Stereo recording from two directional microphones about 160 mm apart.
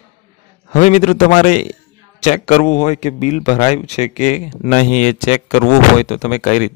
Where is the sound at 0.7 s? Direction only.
45° left (ahead or behind).